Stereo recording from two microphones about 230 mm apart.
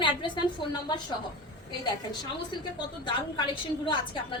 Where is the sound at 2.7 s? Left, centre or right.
Left.